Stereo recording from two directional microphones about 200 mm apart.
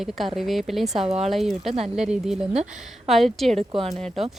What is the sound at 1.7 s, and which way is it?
Speech, 30° right (ahead or behind).